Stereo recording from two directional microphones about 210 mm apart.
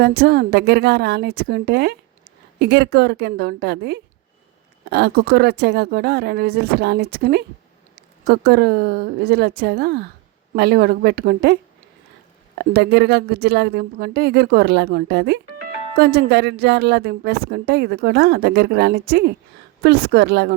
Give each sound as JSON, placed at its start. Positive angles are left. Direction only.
{"t": 0.0, "sound": "a woman's voice", "side_deg": -50}
{"t": 12.5, "sound": "a woman's voice", "side_deg": -50}